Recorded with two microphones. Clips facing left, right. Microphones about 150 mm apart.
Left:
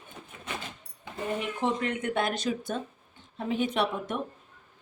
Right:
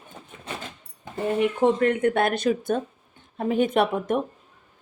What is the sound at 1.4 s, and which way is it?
A woman's voice, 55° right (ahead or behind).